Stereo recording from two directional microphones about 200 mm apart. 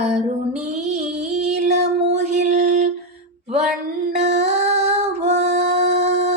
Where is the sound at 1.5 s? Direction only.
35° right (ahead or behind).